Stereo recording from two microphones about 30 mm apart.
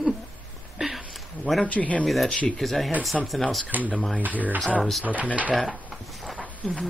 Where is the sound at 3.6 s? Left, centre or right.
Right.